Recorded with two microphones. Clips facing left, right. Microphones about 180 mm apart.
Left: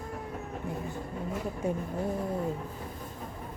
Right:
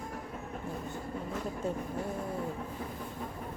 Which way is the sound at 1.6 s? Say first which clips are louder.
Left 4 dB; 10° left (ahead or behind).